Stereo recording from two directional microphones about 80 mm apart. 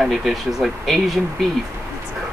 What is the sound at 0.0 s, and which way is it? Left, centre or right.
Speech, centre.